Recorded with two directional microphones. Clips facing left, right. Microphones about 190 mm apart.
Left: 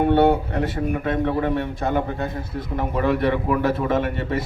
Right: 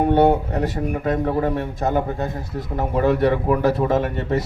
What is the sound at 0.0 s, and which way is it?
A man's voice, 40° right (ahead or behind).